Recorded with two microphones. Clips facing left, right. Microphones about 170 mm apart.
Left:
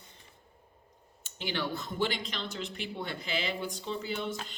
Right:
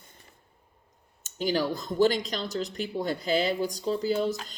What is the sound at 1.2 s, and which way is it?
Speech, 40° right (ahead or behind).